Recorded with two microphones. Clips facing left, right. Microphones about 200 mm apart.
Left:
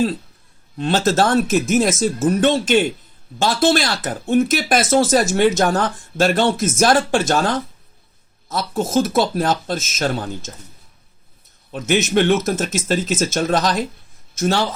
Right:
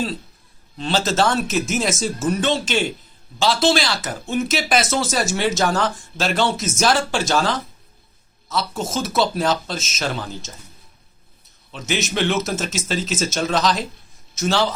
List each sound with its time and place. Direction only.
0.8 s speech: 55° left (ahead or behind)
8.9 s speech: 50° left (ahead or behind)
11.7 s speech: 55° left (ahead or behind)